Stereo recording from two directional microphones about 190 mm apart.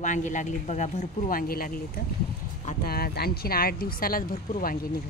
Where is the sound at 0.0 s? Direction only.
40° left (ahead or behind).